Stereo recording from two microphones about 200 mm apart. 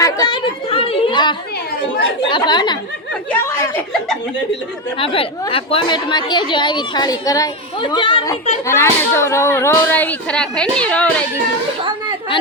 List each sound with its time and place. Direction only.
0.0 s chatter: 20° left (ahead or behind)
2.3 s speech: 20° left (ahead or behind)
4.9 s speech: 30° left (ahead or behind); by 11.1 s 5° left (ahead or behind)